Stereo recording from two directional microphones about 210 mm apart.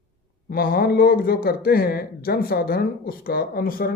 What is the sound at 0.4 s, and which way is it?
Speech, 45° left (ahead or behind).